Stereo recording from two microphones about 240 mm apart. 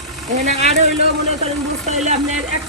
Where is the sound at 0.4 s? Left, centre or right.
Right.